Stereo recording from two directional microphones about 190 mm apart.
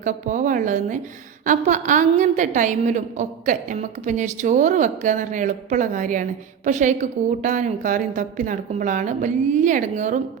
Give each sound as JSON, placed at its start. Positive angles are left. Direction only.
{"t": 0.0, "sound": "a woman's voice", "side_deg": -45}